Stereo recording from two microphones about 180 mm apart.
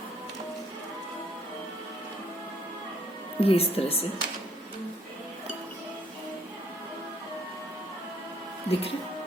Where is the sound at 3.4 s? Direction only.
30° left (ahead or behind).